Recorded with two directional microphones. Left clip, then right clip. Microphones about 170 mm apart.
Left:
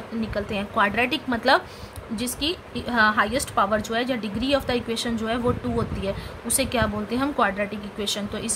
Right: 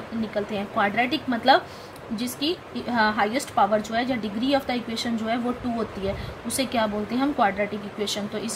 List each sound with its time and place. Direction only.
0.3 s a woman's voice: 25° left (ahead or behind)